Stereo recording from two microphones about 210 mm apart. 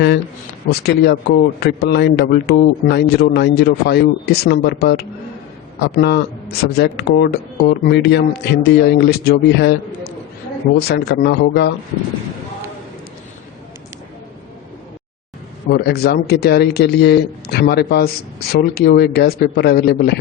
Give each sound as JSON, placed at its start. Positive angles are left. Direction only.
{"t": 0.7, "sound": "speech", "side_deg": 50}
{"t": 10.8, "sound": "speech", "side_deg": 50}
{"t": 15.7, "sound": "speech", "side_deg": 50}